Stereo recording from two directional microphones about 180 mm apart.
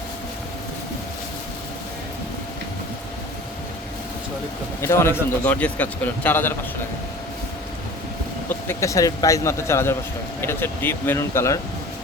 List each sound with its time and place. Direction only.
4.8 s a man's voice: 15° left (ahead or behind)
8.6 s a man's voice: 15° left (ahead or behind)